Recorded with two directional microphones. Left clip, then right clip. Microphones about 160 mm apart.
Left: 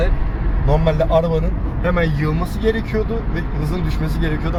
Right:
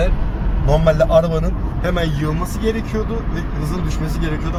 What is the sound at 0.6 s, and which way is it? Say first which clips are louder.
Speech: right 3 dB; 20° right (ahead or behind).